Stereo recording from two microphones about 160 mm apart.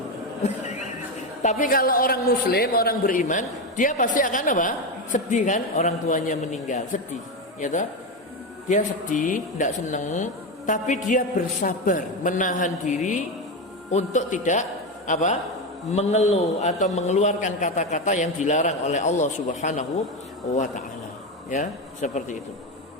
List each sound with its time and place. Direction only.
1.4 s a man's voice: 50° left (ahead or behind)